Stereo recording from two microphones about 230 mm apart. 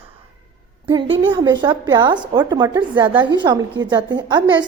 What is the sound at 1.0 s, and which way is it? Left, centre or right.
Speech, right.